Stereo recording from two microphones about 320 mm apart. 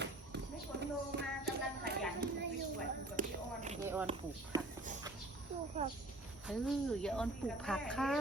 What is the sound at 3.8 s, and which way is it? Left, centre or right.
Speech, centre.